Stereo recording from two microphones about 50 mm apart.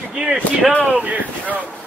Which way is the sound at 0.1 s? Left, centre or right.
Right.